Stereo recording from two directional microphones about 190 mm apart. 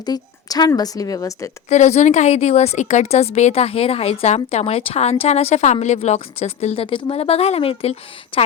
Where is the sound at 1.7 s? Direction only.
40° left (ahead or behind).